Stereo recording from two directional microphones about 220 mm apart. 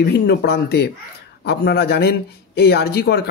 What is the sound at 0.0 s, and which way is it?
A man's voice, 45° left (ahead or behind).